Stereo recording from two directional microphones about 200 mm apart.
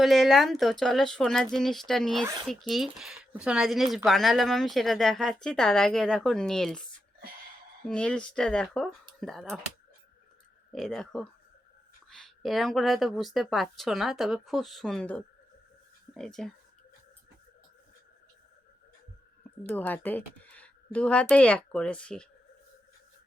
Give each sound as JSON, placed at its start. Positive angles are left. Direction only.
{"t": 0.0, "sound": "speech", "side_deg": 0}
{"t": 2.2, "sound": "speech", "side_deg": -20}
{"t": 2.5, "sound": "speech", "side_deg": 0}
{"t": 7.9, "sound": "speech", "side_deg": 5}
{"t": 10.7, "sound": "speech", "side_deg": 0}
{"t": 19.6, "sound": "speech", "side_deg": 10}